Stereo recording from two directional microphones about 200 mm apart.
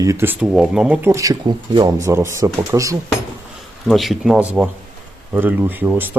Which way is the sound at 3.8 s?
Centre (ahead or behind).